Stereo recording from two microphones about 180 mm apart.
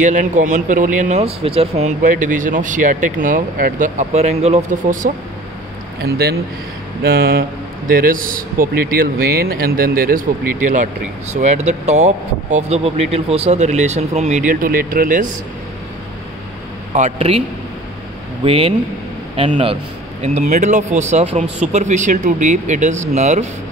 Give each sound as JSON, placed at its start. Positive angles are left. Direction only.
{"t": 0.0, "sound": "speech", "side_deg": -45}
{"t": 6.0, "sound": "speech", "side_deg": -60}
{"t": 16.9, "sound": "speech", "side_deg": -35}
{"t": 18.4, "sound": "speech", "side_deg": -30}